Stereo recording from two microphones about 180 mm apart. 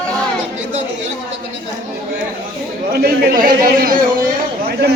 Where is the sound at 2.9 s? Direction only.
60° right (ahead or behind).